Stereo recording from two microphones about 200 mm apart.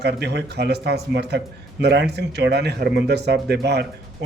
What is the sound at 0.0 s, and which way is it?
Speech, 55° right (ahead or behind).